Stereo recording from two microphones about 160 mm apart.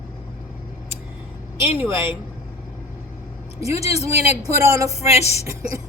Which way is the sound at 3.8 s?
40° left (ahead or behind).